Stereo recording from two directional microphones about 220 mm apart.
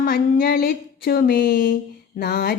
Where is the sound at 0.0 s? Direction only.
40° left (ahead or behind).